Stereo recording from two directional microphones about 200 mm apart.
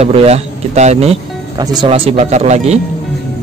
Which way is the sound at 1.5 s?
20° right (ahead or behind).